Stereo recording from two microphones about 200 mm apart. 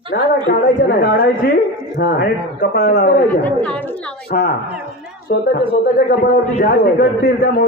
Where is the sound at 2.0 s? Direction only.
60° left (ahead or behind).